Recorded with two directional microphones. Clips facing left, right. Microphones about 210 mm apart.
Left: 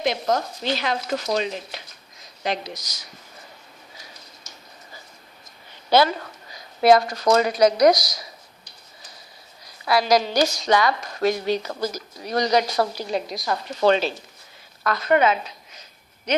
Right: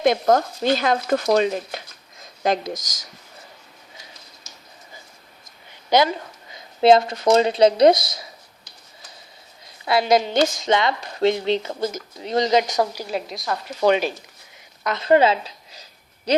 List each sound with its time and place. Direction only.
0.0 s speech: 50° right (ahead or behind)
5.9 s speech: 15° right (ahead or behind)
9.6 s a woman's voice: 25° right (ahead or behind); by 13.7 s centre (ahead or behind)
13.8 s speech: 15° right (ahead or behind)
14.8 s a sound: 25° right (ahead or behind)